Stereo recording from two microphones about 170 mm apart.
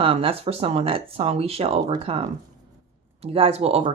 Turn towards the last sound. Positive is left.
turn(degrees=-35)  # may be behind; listen again after turning